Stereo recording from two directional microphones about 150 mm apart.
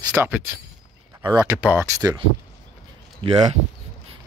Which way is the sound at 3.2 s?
40° right (ahead or behind).